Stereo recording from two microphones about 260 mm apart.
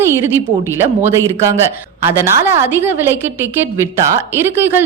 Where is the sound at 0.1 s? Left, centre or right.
Centre.